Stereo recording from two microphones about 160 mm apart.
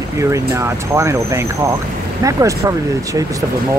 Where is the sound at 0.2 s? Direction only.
20° right (ahead or behind).